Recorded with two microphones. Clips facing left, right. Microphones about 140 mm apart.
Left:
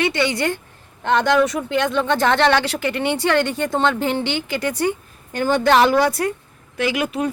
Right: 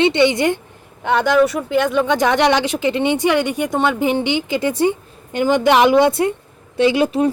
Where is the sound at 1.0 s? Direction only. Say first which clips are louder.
Right 2 dB; 5° right (ahead or behind).